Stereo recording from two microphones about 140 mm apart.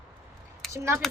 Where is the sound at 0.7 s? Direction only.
20° right (ahead or behind).